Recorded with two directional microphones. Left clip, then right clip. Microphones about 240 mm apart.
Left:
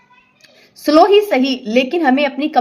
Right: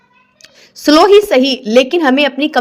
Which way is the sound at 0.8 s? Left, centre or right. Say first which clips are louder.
Right 3 dB; right.